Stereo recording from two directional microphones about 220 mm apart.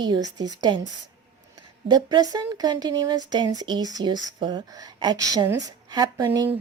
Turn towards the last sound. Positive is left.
turn(degrees=-15)  # may be behind; listen again after turning